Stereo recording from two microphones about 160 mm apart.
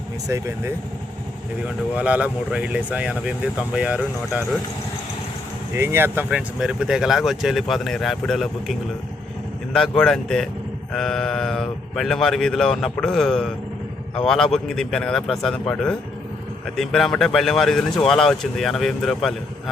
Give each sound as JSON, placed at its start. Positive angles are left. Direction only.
{"t": 0.3, "sound": "speech", "side_deg": -20}
{"t": 5.7, "sound": "speech", "side_deg": -15}
{"t": 9.7, "sound": "speech", "side_deg": 5}